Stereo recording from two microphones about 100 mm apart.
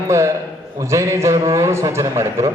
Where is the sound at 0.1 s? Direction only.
30° right (ahead or behind).